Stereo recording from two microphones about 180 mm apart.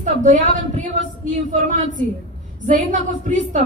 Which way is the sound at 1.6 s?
45° right (ahead or behind).